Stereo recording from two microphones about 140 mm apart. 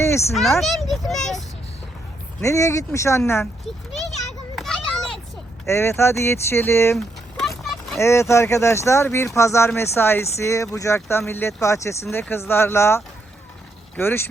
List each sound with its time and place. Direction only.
0.0 s a sound: 20° left (ahead or behind)
0.6 s a child's voice: centre (ahead or behind)
2.4 s speech: 20° left (ahead or behind)
4.5 s children playing: 5° left (ahead or behind)
5.6 s speech: 20° left (ahead or behind)
6.9 s a sound: centre (ahead or behind)
7.9 s speech: 20° left (ahead or behind)